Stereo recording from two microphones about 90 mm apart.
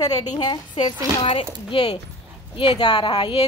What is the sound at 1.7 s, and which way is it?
Speech, 75° left (ahead or behind).